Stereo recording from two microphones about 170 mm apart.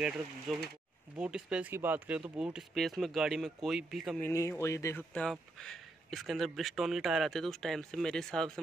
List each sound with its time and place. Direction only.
1.1 s speech: 5° right (ahead or behind)
4.2 s speech: 15° left (ahead or behind)
5.1 s speech: 5° left (ahead or behind)